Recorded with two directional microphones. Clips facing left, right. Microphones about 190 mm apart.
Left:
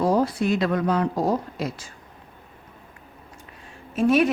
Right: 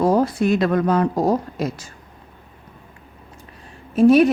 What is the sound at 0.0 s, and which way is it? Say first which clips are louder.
Speech: right 4 dB; 50° right (ahead or behind).